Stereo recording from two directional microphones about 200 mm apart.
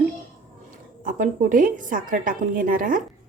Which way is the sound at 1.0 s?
40° right (ahead or behind).